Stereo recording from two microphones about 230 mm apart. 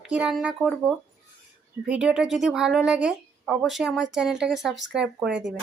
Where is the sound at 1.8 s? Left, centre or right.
Centre.